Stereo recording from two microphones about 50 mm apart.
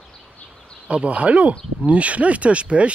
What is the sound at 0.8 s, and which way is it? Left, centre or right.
Speech, right.